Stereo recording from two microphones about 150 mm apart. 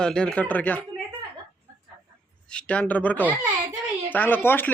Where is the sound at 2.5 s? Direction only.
10° left (ahead or behind).